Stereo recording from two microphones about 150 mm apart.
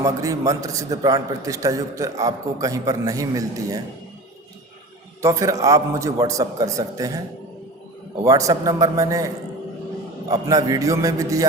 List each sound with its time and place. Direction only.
0.0 s a man's voice: 20° right (ahead or behind)
5.2 s a man's voice: 20° right (ahead or behind)
8.2 s a man's voice: 20° right (ahead or behind)